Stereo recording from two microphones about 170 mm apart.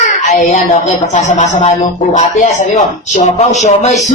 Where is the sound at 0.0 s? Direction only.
45° left (ahead or behind).